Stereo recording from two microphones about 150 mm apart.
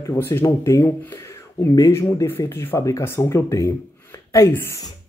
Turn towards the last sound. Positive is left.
turn(degrees=15)  # may be behind; listen again after turning